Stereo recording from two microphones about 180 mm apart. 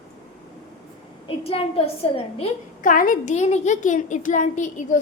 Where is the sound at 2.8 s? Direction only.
50° left (ahead or behind).